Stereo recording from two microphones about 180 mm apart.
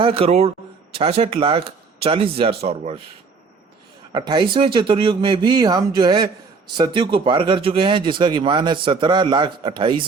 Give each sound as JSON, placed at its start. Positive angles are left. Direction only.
{"t": 0.0, "sound": "speech", "side_deg": -30}
{"t": 4.1, "sound": "speech", "side_deg": -25}